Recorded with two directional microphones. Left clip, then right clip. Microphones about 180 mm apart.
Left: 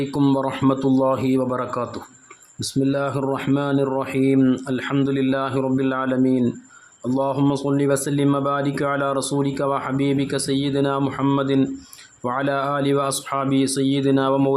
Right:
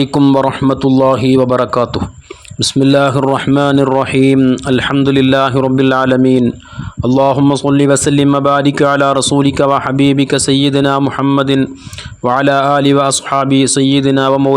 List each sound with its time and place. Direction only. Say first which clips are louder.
0.6 s speech: right 8 dB; 35° right (ahead or behind)
4.4 s speech: right 7 dB; 25° right (ahead or behind)
4.6 s speech: right 11 dB; 40° right (ahead or behind)
11.0 s speech: right 8 dB; 25° right (ahead or behind)
11.3 s speech: right 8 dB; 40° right (ahead or behind)